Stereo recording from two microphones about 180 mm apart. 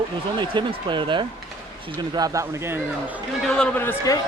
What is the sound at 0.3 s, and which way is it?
Speech, 25° right (ahead or behind).